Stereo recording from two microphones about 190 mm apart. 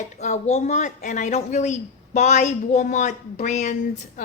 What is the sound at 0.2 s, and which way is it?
Speech, 35° left (ahead or behind).